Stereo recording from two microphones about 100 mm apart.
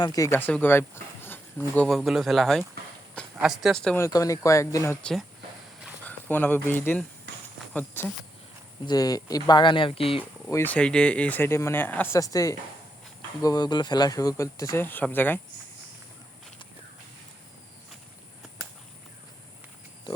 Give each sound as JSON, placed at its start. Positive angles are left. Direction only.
{"t": 0.0, "sound": "speech", "side_deg": 40}
{"t": 0.3, "sound": "speech", "side_deg": 20}
{"t": 1.9, "sound": "speech", "side_deg": 0}
{"t": 3.9, "sound": "speech", "side_deg": 30}
{"t": 6.1, "sound": "speech", "side_deg": 15}
{"t": 8.9, "sound": "speech", "side_deg": 40}
{"t": 10.5, "sound": "speech", "side_deg": 20}
{"t": 12.1, "sound": "speech", "side_deg": 35}
{"t": 14.8, "sound": "speech", "side_deg": 20}